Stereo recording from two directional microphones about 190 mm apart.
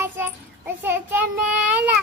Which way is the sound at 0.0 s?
10° right (ahead or behind).